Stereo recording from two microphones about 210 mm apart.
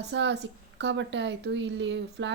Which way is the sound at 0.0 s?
55° right (ahead or behind).